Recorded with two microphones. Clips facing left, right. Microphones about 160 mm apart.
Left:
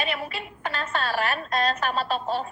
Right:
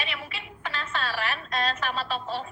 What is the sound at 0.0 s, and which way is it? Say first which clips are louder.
A woman's voice: left 7 dB; 45° left (ahead or behind).